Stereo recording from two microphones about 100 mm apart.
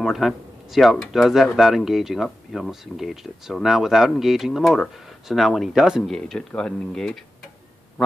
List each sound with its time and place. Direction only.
0.0 s speech: centre (ahead or behind)